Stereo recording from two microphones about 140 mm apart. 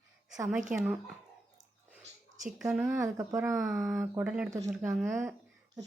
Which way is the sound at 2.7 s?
10° right (ahead or behind).